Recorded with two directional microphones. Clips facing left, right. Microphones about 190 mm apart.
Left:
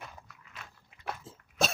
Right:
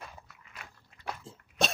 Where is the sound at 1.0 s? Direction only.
Centre (ahead or behind).